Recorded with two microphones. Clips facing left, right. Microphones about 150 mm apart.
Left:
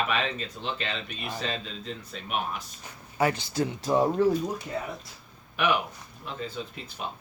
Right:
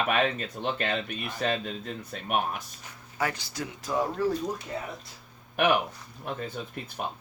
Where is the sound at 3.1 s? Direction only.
25° left (ahead or behind).